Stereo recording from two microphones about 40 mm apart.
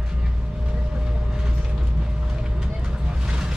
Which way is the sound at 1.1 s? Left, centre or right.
Right.